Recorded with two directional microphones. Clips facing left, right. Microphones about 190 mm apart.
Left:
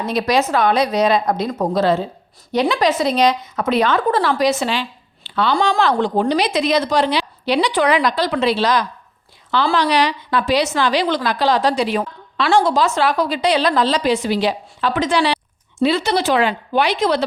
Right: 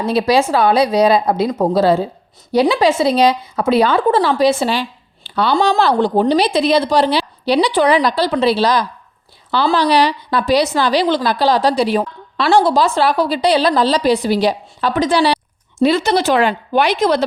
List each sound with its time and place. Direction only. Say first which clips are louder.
0.0 s speech: right 4 dB; 30° right (ahead or behind)